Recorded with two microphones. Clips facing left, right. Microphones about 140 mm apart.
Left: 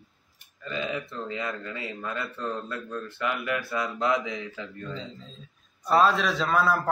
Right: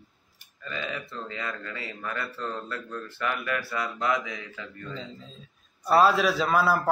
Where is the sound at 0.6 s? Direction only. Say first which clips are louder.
Left 3 dB; 20° left (ahead or behind).